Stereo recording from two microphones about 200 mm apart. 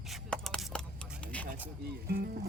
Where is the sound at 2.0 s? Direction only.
50° right (ahead or behind).